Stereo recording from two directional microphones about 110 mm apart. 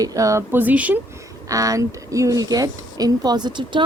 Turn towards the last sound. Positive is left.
turn(degrees=-45)  # may be behind; listen again after turning